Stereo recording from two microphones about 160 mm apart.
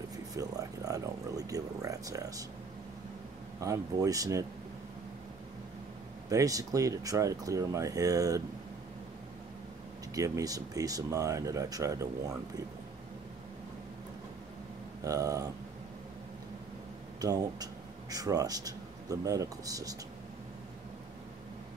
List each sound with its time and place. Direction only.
0.4 s speech: 20° right (ahead or behind)
3.5 s speech: 20° right (ahead or behind)
6.2 s speech: 20° right (ahead or behind)
10.1 s speech: 20° right (ahead or behind)
15.0 s speech: 20° right (ahead or behind)
17.2 s speech: 25° right (ahead or behind)